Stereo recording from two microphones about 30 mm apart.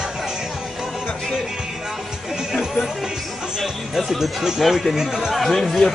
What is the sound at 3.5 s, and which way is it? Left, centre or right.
Speech, centre.